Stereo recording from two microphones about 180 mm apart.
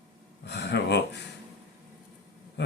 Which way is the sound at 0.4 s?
75° left (ahead or behind).